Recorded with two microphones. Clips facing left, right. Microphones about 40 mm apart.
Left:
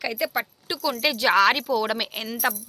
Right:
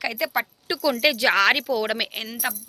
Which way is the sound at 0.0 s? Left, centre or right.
Right.